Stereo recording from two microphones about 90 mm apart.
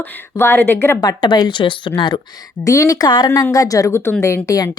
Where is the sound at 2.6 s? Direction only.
40° left (ahead or behind).